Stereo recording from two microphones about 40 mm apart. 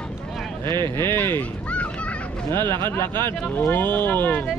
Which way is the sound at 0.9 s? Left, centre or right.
Left.